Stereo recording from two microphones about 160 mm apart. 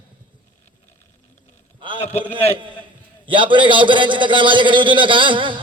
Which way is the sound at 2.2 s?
30° right (ahead or behind).